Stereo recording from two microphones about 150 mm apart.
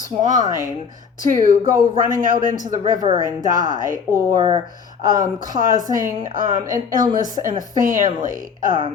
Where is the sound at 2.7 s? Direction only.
25° right (ahead or behind).